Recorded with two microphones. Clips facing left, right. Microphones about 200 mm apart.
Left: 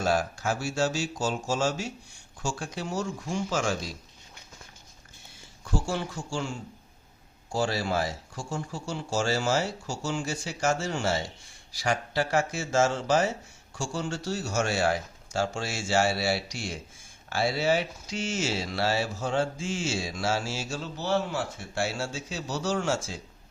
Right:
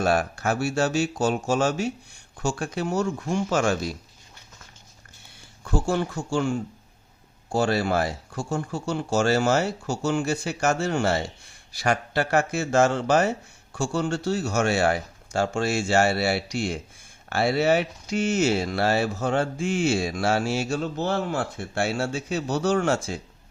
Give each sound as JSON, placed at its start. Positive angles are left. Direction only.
{"t": 0.0, "sound": "speech", "side_deg": -60}
{"t": 5.6, "sound": "speech", "side_deg": -55}